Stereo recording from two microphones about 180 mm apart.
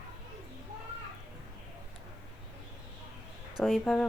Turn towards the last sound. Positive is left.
turn(degrees=5)  # may be behind; listen again after turning